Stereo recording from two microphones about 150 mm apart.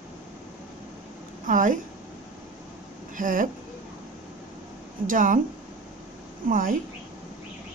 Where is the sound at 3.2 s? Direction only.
60° right (ahead or behind).